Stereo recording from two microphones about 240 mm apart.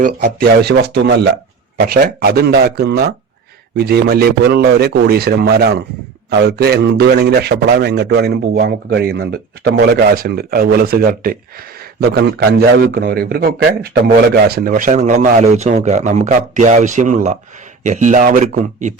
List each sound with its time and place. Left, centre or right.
0.0 s a man's voice: right